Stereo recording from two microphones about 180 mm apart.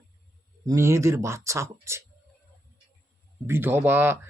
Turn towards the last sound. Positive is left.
turn(degrees=-10)  # may be behind; listen again after turning